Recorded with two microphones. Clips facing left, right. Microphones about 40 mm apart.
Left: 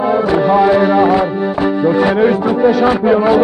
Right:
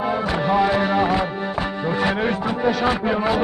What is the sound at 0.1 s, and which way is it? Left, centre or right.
Music, left.